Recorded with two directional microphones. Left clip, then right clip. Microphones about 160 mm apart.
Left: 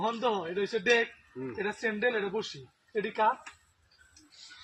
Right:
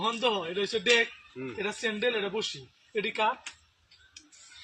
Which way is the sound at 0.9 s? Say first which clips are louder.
Right 2 dB; centre (ahead or behind).